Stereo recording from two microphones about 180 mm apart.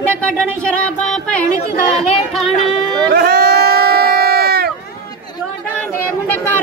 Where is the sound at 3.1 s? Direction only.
60° right (ahead or behind).